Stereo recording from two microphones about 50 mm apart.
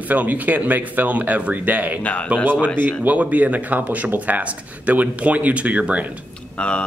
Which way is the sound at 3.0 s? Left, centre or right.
Right.